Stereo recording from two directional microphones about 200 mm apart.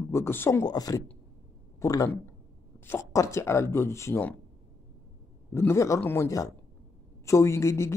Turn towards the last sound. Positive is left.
turn(degrees=15)  # may be behind; listen again after turning